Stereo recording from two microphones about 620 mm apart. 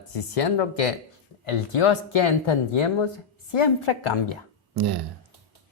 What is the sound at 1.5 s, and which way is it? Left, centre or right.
Speech, left.